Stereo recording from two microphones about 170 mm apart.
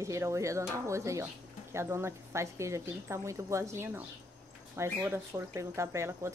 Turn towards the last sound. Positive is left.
turn(degrees=-15)  # may be behind; listen again after turning